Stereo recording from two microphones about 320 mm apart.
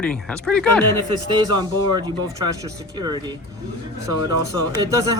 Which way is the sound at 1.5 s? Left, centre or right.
Centre.